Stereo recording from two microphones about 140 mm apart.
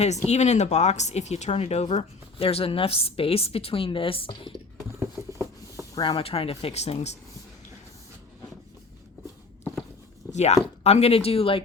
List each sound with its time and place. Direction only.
0.3 s speech: 55° left (ahead or behind); by 4.5 s 35° left (ahead or behind)
4.9 s patter: 20° right (ahead or behind)
5.9 s speech: 30° left (ahead or behind); by 7.1 s 50° left (ahead or behind)
10.3 s speech: 50° left (ahead or behind)